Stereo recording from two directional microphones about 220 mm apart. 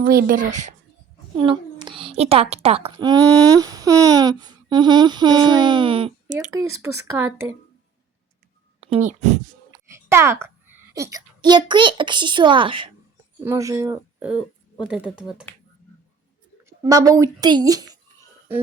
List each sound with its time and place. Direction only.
0.0 s speech: 40° right (ahead or behind)
1.4 s a child's voice: 25° right (ahead or behind)
3.6 s a sound: 15° right (ahead or behind)
6.5 s speech: 15° right (ahead or behind)
8.8 s speech: 30° right (ahead or behind)
9.7 s a sound: 10° right (ahead or behind)
13.4 s speech: 10° right (ahead or behind)
16.6 s speech: 15° right (ahead or behind)